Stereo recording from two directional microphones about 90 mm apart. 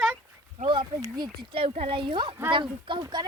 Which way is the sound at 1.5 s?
90° right.